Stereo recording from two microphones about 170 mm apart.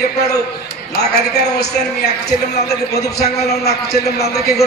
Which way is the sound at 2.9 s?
70° left (ahead or behind).